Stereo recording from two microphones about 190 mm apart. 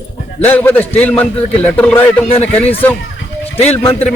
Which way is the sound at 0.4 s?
10° left (ahead or behind).